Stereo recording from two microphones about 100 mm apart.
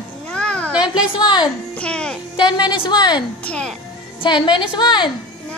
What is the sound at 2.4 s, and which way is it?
Speech, 45° left (ahead or behind).